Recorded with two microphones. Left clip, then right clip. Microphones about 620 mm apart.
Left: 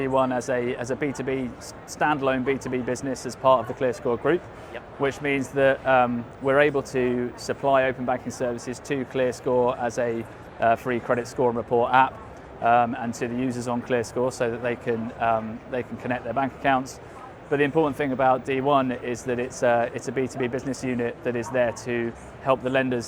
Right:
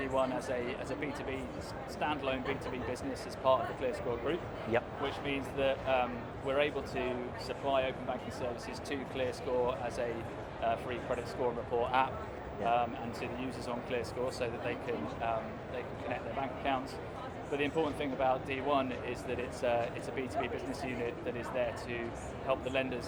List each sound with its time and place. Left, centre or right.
0.0 s speech: left